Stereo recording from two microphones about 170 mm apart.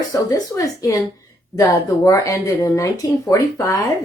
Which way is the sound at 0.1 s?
20° left (ahead or behind).